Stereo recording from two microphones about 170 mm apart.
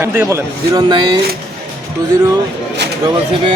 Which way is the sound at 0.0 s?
15° right (ahead or behind).